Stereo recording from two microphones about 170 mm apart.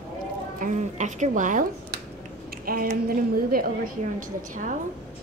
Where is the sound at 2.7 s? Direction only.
60° right (ahead or behind).